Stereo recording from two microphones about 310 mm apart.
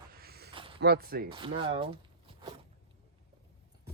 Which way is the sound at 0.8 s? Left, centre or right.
Right.